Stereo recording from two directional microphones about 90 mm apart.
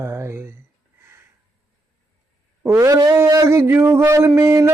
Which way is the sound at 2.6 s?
35° right (ahead or behind).